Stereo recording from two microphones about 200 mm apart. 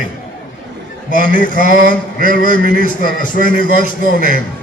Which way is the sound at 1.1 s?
40° left (ahead or behind).